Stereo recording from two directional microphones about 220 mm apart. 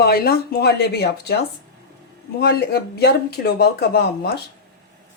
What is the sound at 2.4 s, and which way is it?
Speech, 45° left (ahead or behind).